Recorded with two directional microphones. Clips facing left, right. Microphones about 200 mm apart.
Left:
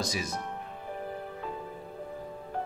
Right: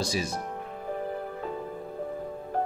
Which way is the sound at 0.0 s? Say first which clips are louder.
Right 4 dB; 30° right (ahead or behind).